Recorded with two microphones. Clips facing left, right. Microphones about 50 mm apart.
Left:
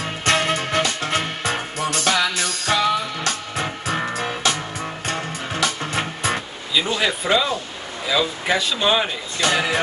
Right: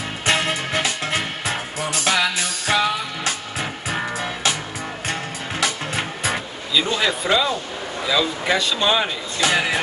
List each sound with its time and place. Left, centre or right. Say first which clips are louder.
0.2 s music: left 1 dB; centre
5.6 s music: left 1 dB; centre
6.7 s speech: right 1 dB; centre